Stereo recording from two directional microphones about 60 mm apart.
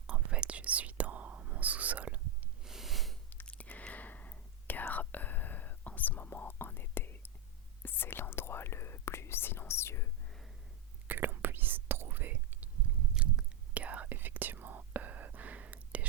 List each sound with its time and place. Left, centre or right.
0.1 s whispering: centre
2.6 s a sound: centre
3.6 s whispering: left
11.1 s whispering: right
13.2 s whispering: centre
13.7 s whispering: right